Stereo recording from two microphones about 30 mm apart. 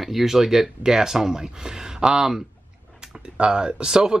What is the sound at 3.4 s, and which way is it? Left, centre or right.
Speech, right.